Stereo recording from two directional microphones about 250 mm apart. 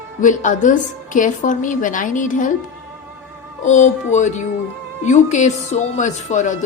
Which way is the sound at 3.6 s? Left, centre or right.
Left.